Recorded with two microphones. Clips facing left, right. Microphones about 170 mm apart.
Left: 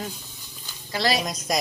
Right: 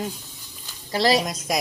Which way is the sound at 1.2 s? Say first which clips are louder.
Right 1 dB; 5° right (ahead or behind).